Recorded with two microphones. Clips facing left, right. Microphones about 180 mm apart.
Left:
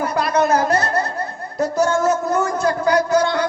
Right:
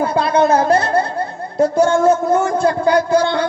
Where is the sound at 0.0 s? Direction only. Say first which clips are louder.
Right 4 dB; 30° right (ahead or behind).